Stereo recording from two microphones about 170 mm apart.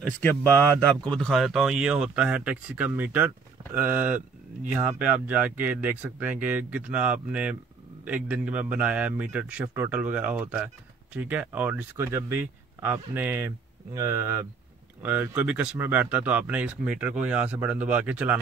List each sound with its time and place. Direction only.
0.0 s speech: 10° left (ahead or behind); by 18.4 s 5° right (ahead or behind)